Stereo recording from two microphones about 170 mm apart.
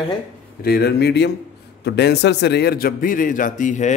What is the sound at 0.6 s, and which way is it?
Speech, 65° left (ahead or behind).